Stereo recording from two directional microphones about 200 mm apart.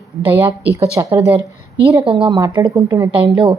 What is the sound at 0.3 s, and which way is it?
Speech, 10° right (ahead or behind).